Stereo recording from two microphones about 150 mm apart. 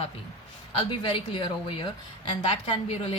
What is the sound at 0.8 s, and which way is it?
Speech, 35° left (ahead or behind).